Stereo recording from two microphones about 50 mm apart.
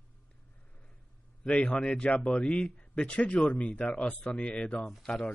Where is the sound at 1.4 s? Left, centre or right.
Left.